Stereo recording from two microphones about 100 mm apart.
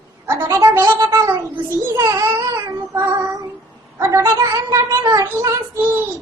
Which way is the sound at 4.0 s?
30° right (ahead or behind).